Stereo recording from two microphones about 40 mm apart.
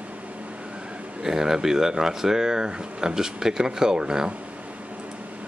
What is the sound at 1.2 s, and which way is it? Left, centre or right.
Speech, centre.